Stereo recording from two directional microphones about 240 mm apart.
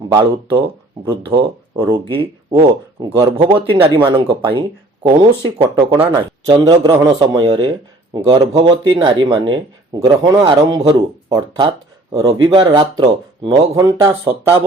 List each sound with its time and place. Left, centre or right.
0.1 s speech: centre